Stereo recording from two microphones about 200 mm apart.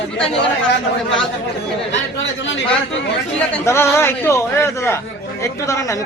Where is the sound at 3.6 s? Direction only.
15° left (ahead or behind).